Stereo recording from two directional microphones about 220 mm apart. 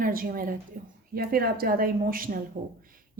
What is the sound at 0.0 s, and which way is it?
A woman's voice, 40° right (ahead or behind).